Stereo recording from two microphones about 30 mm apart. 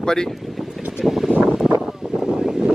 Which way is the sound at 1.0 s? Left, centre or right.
Centre.